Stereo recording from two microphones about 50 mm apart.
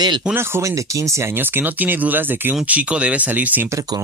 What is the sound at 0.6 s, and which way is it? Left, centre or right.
Speech, right.